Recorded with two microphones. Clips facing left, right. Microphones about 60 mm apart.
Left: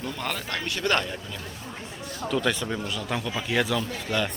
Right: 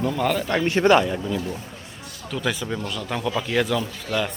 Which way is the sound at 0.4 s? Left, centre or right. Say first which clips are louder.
Right 10 dB; right.